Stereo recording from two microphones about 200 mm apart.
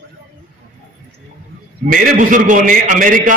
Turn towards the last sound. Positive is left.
turn(degrees=-40)  # may be behind; listen again after turning